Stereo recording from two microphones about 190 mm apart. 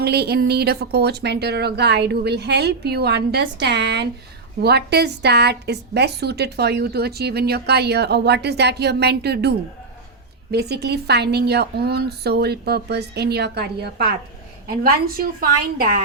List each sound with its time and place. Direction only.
0.0 s a woman's voice: 60° right (ahead or behind)